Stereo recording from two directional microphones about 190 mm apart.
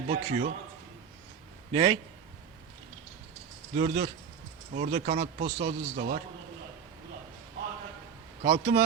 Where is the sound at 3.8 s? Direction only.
35° right (ahead or behind).